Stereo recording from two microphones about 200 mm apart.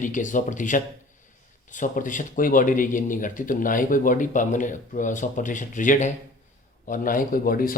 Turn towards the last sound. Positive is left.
turn(degrees=45)  # may be behind; listen again after turning